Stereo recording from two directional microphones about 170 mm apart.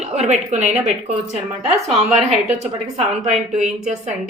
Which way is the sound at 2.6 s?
40° right (ahead or behind).